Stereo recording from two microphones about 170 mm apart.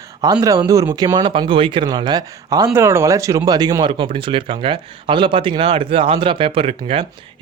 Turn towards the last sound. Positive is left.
turn(degrees=-35)  # may be behind; listen again after turning